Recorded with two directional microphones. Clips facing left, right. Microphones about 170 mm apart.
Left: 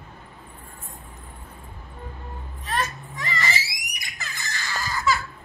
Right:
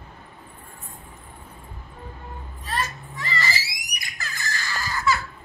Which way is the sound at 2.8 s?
20° left (ahead or behind).